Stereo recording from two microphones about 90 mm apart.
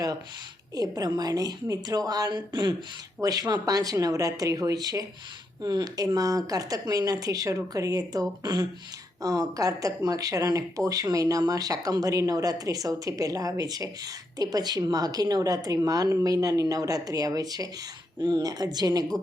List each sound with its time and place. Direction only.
0.8 s speech: 45° right (ahead or behind)
3.2 s speech: 45° right (ahead or behind)
18.2 s speech: 55° right (ahead or behind)